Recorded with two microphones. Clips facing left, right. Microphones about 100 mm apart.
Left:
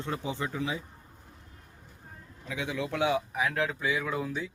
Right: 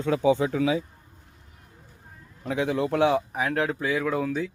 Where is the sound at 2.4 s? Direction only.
50° right (ahead or behind).